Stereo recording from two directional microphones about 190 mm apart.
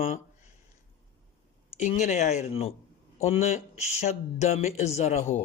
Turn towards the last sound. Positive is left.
turn(degrees=35)  # may be behind; listen again after turning